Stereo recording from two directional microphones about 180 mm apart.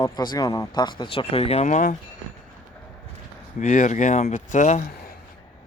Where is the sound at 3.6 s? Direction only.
45° left (ahead or behind).